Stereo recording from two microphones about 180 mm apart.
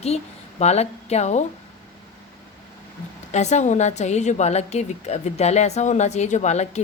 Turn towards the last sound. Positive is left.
turn(degrees=40)  # may be behind; listen again after turning